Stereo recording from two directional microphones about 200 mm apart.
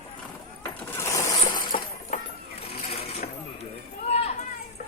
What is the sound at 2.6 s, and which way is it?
Sewing machine, 30° left (ahead or behind).